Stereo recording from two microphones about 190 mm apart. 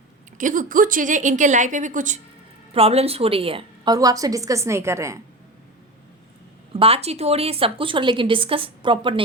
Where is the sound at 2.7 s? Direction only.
30° right (ahead or behind).